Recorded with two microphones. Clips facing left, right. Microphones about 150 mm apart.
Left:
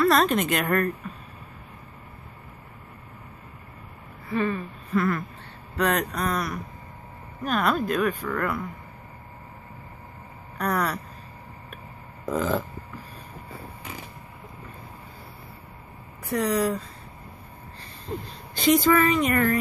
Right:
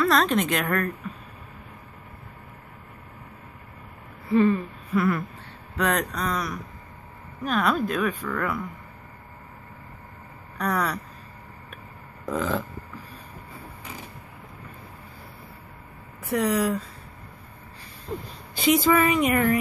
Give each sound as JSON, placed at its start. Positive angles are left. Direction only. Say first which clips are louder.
{"t": 0.0, "sound": "speech", "louder": "left 1 dB", "side_deg": 5}
{"t": 4.3, "sound": "a sound", "louder": "right 6 dB", "side_deg": -20}
{"t": 4.9, "sound": "a woman's voice", "louder": "right 1 dB", "side_deg": -10}
{"t": 10.6, "sound": "speech", "louder": "even", "side_deg": 0}
{"t": 12.3, "sound": "speech", "louder": "left 1 dB", "side_deg": 0}
{"t": 16.3, "sound": "speech", "louder": "right 1 dB", "side_deg": -5}
{"t": 18.5, "sound": "a woman's voice", "louder": "left 1 dB", "side_deg": -10}